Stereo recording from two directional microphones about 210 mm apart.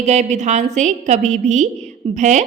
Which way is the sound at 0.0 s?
30° right (ahead or behind).